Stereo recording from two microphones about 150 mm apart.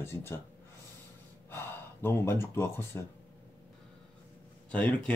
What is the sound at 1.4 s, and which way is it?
Speech, 15° left (ahead or behind).